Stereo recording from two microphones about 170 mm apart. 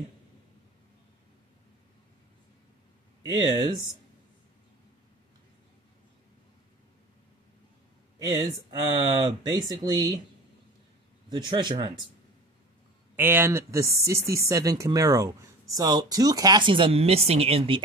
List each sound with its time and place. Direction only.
3.2 s speech: 25° right (ahead or behind)
8.3 s speech: 25° right (ahead or behind)
11.2 s speech: 25° right (ahead or behind)
13.1 s speech: 10° right (ahead or behind); by 17.8 s 35° right (ahead or behind)